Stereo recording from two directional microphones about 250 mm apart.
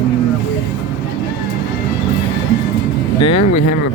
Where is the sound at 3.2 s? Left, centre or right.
Left.